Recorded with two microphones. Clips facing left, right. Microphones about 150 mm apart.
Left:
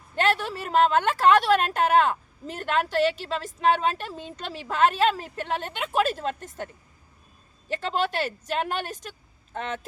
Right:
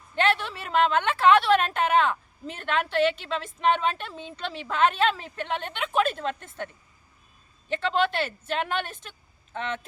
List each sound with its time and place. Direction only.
0.2 s a woman's voice: 40° left (ahead or behind)
7.7 s a woman's voice: 40° left (ahead or behind)